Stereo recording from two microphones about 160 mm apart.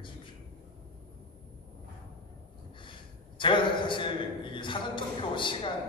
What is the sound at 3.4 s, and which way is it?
A man's voice, 30° left (ahead or behind).